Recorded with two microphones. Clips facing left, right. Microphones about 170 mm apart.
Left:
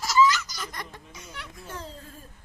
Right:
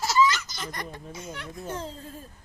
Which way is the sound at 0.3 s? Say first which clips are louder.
Left 1 dB; 25° right (ahead or behind).